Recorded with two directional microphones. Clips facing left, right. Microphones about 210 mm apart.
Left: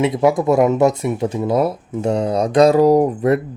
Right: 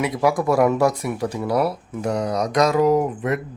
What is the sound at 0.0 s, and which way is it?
Speech, 25° left (ahead or behind).